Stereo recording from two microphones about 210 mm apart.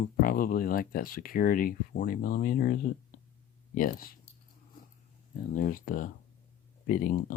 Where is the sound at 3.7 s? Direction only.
40° left (ahead or behind).